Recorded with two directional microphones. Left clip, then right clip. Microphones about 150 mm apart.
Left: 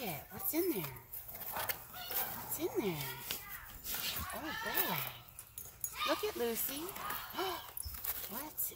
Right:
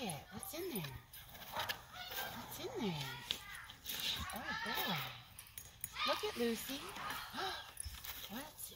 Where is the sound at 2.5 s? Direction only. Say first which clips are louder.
Left 8 dB; 30° left (ahead or behind).